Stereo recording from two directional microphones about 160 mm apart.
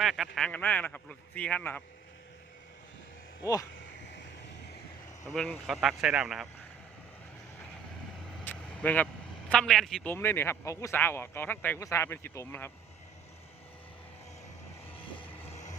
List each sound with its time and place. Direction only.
0.0 s a man's voice: centre (ahead or behind)
3.4 s speech: 20° left (ahead or behind)
5.3 s speech: centre (ahead or behind)
8.4 s vehicle: 10° left (ahead or behind)
9.5 s a man's voice: centre (ahead or behind)
14.9 s music: 30° left (ahead or behind)
15.3 s vehicle: 10° left (ahead or behind)